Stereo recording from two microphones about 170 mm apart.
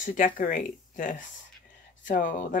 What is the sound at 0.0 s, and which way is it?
Speech, 50° left (ahead or behind).